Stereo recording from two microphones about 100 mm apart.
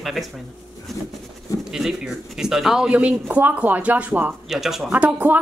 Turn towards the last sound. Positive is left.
turn(degrees=-15)  # may be behind; listen again after turning